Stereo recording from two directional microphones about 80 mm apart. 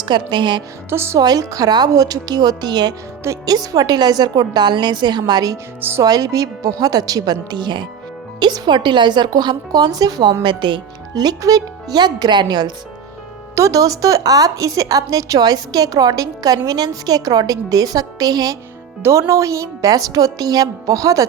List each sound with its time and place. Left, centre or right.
0.0 s a woman's voice: right
0.9 s speech: right
1.2 s a woman's voice: right
3.4 s a woman's voice: right
10.4 s speech: right
11.1 s a woman's voice: right
13.6 s a woman's voice: right
19.3 s a woman's voice: right